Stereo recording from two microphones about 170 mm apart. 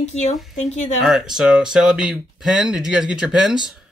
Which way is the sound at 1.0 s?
Centre (ahead or behind).